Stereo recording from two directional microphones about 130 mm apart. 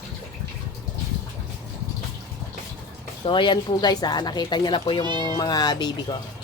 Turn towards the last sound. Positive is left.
turn(degrees=30)  # may be behind; listen again after turning